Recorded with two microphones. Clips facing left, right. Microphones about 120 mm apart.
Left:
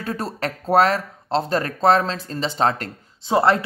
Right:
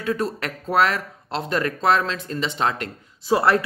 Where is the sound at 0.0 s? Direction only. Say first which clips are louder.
Right 2 dB; 35° left (ahead or behind).